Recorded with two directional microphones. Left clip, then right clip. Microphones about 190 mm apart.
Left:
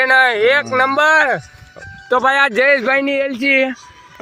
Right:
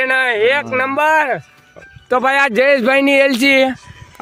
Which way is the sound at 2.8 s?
55° right (ahead or behind).